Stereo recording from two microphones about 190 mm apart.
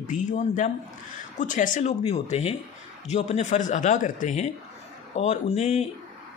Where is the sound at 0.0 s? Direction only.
40° left (ahead or behind).